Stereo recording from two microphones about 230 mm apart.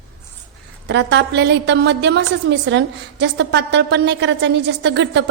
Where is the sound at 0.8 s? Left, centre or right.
Right.